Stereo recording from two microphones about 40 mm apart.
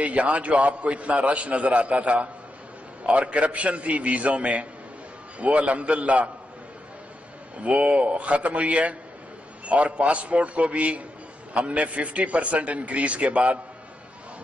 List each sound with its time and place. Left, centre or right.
0.0 s a man's voice: right
7.6 s a man's voice: right